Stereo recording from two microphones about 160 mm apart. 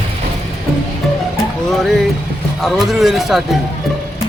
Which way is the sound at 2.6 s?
Centre (ahead or behind).